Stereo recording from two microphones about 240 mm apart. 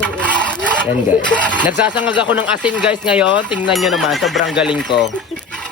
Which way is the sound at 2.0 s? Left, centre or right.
Centre.